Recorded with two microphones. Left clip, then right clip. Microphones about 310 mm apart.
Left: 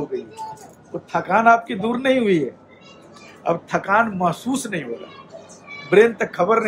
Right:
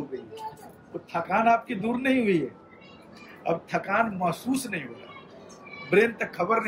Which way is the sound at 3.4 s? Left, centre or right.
Centre.